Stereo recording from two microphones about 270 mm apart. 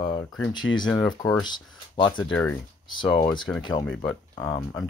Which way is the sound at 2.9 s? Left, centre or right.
Centre.